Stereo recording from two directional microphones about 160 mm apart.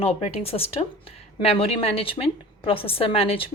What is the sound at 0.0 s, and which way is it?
A woman's voice, 40° left (ahead or behind).